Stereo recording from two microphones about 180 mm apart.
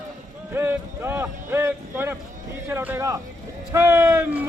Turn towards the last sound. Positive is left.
turn(degrees=-10)  # may be behind; listen again after turning